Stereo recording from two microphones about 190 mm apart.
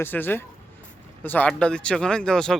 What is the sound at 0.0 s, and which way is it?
Speech, 10° left (ahead or behind).